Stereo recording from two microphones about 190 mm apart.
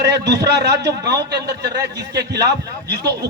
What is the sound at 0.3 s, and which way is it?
Speech, 60° right (ahead or behind).